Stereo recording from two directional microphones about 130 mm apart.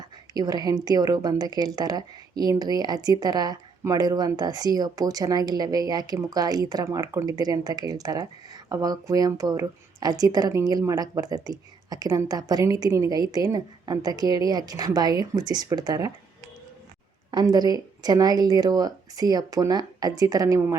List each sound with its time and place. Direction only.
0.0 s a woman's voice: 30° right (ahead or behind)
17.3 s a woman's voice: 30° right (ahead or behind)